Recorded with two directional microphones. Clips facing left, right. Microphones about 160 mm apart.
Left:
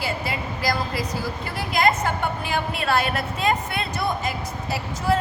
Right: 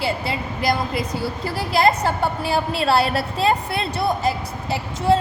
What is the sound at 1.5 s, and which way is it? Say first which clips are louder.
A woman's voice: right 3 dB; 35° right (ahead or behind).